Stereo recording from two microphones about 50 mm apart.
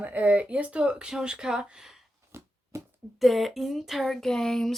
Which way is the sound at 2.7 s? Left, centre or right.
Right.